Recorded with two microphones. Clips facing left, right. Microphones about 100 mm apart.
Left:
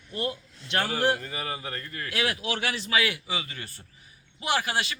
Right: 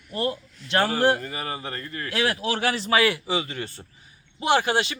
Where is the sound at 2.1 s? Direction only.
35° right (ahead or behind).